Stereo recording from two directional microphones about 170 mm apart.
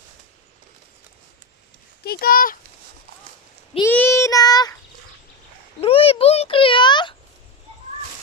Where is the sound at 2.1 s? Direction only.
60° left (ahead or behind).